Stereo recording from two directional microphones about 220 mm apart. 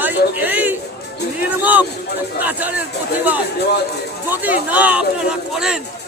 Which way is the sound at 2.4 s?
10° right (ahead or behind).